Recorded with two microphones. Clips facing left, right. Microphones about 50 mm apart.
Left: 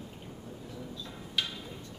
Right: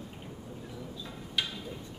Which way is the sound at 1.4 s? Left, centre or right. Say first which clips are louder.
Even; centre.